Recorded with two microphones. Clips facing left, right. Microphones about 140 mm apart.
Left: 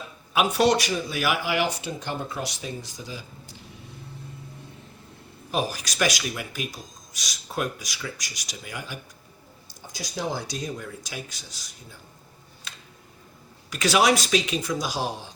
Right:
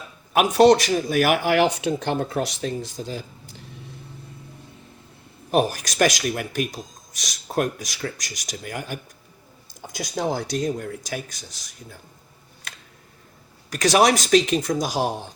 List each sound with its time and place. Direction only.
0.3 s speech: 45° right (ahead or behind); by 3.2 s 60° right (ahead or behind)
5.5 s speech: 55° right (ahead or behind)
10.5 s speech: 50° right (ahead or behind)
13.7 s speech: 40° right (ahead or behind)